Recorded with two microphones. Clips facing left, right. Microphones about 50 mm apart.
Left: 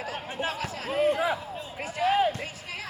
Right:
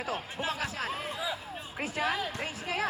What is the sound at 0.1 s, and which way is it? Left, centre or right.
Speech, left.